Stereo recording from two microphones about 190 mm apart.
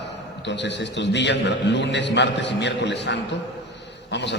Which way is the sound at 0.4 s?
65° left (ahead or behind).